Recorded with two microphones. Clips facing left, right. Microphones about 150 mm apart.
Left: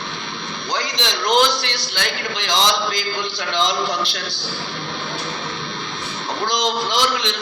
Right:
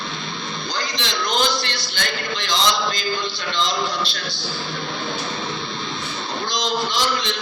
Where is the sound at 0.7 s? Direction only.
75° left (ahead or behind).